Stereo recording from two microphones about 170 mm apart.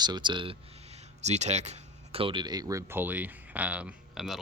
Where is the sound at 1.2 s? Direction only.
40° right (ahead or behind).